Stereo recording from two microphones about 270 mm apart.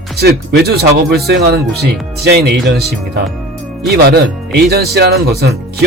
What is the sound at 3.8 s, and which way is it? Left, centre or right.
Speech, right.